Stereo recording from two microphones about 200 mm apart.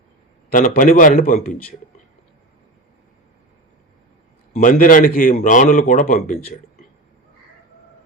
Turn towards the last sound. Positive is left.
turn(degrees=45)  # may be behind; listen again after turning